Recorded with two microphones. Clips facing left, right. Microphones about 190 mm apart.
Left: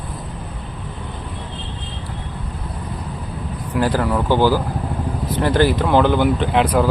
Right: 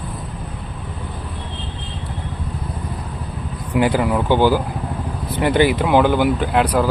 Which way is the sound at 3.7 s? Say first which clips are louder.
Right 2 dB; 15° right (ahead or behind).